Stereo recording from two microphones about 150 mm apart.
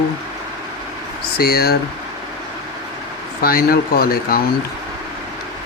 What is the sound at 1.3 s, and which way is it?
Speech, 90° left.